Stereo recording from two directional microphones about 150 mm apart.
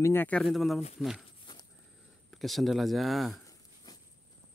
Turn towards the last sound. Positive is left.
turn(degrees=25)  # may be behind; listen again after turning